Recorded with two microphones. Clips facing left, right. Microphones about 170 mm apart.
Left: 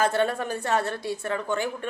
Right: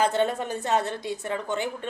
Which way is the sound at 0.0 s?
20° right (ahead or behind).